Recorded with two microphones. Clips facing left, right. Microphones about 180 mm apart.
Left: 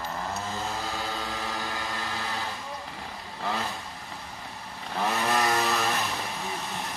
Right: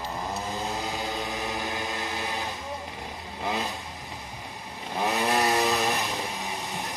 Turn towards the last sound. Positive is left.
turn(degrees=-15)  # may be behind; listen again after turning